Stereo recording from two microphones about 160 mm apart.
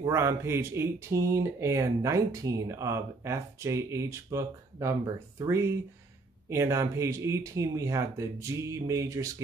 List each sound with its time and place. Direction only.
0.0 s speech: 15° right (ahead or behind)